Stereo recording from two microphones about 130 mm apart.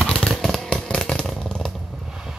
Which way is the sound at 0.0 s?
5° left (ahead or behind).